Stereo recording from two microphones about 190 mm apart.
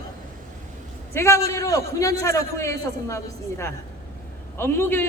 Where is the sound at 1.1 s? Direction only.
15° left (ahead or behind).